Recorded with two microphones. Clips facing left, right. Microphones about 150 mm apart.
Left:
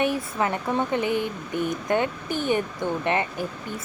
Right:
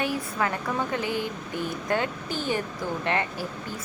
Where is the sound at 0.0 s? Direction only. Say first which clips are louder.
Left 3 dB; 25° left (ahead or behind).